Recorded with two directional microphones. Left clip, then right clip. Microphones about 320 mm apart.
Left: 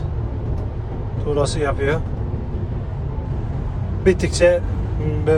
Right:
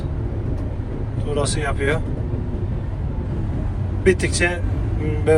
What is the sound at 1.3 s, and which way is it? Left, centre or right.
Speech, centre.